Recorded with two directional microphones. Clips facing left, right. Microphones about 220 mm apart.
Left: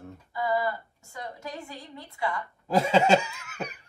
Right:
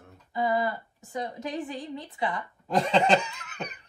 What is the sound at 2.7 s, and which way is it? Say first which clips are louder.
Laughter: left 2 dB; 5° left (ahead or behind).